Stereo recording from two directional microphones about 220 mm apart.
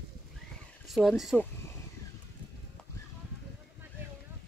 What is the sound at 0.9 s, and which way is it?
Speech, centre (ahead or behind).